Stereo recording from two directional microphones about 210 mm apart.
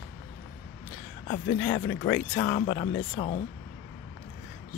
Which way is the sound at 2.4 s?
40° left (ahead or behind).